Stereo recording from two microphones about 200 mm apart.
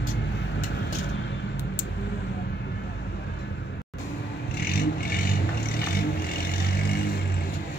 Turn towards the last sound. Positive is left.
turn(degrees=50)  # may be behind; listen again after turning